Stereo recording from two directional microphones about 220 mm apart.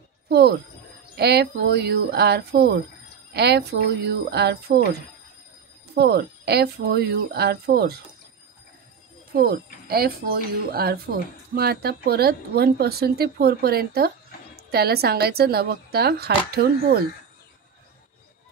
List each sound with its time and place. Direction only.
0.3 s speech: 50° right (ahead or behind)
5.9 s speech: 45° right (ahead or behind)
9.3 s speech: 45° right (ahead or behind)